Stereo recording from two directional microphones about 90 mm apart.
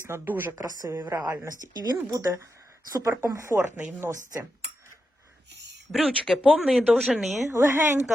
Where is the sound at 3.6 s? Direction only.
20° right (ahead or behind).